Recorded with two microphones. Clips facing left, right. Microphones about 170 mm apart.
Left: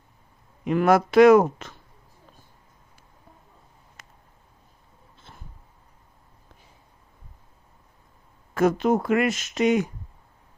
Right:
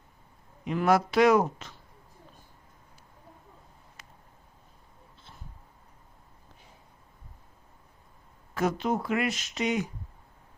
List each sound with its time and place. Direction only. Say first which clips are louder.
0.6 s speech: left 5 dB; 60° left (ahead or behind)
4.0 s a sound: left 2 dB; 45° left (ahead or behind)
8.5 s speech: left 7 dB; 50° left (ahead or behind)